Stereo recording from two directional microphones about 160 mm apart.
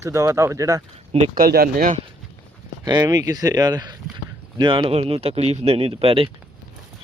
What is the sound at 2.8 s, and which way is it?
Speech, 25° right (ahead or behind).